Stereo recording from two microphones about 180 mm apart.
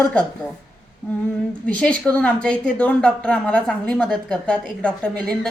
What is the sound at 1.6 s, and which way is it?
Speech, 5° left (ahead or behind).